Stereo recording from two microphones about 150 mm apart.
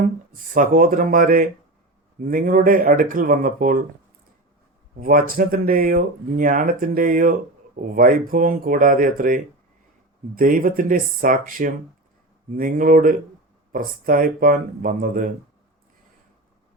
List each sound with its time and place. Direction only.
0.0 s speech: 65° right (ahead or behind)
4.9 s speech: 70° right (ahead or behind)